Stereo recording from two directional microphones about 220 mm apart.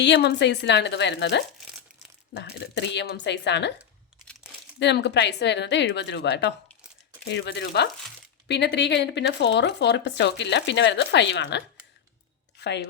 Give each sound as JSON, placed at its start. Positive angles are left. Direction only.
{"t": 0.0, "sound": "speech", "side_deg": 50}
{"t": 4.8, "sound": "a woman's voice", "side_deg": 50}